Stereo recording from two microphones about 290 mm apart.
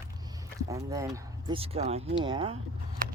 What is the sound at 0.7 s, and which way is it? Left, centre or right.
Speech, centre.